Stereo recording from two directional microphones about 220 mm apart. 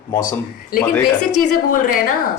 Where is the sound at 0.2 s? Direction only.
40° left (ahead or behind).